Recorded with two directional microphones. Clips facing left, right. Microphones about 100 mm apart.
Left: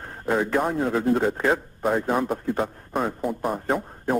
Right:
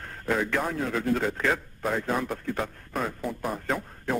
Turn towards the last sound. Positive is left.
turn(degrees=30)  # may be behind; listen again after turning